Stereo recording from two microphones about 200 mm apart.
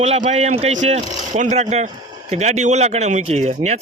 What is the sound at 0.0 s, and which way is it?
Speech, 35° right (ahead or behind).